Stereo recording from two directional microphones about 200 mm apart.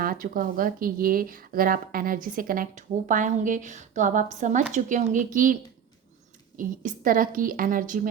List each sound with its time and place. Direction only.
0.0 s speech: 45° right (ahead or behind)
6.6 s speech: 45° right (ahead or behind)